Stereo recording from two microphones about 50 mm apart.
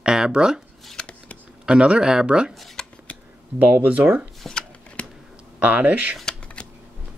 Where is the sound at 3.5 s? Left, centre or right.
Right.